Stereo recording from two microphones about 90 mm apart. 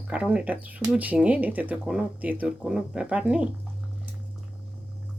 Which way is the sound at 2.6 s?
5° right (ahead or behind).